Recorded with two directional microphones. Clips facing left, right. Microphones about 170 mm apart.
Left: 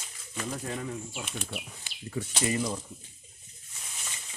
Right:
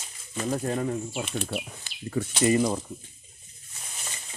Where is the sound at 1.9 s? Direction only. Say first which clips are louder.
Right 1 dB; 15° left (ahead or behind).